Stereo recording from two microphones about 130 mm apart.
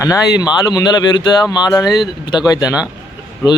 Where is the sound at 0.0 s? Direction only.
25° left (ahead or behind).